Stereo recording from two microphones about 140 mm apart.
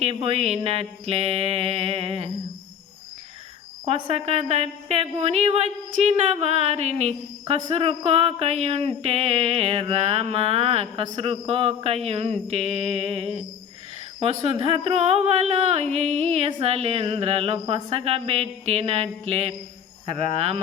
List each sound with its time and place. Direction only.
0.0 s speech: 45° right (ahead or behind)
3.8 s speech: 50° right (ahead or behind)
14.5 s speech: 40° right (ahead or behind)